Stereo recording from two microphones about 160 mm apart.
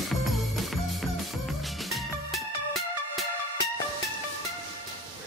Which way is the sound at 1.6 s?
Centre (ahead or behind).